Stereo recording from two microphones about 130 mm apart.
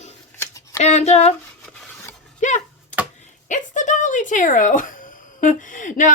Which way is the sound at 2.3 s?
70° left (ahead or behind).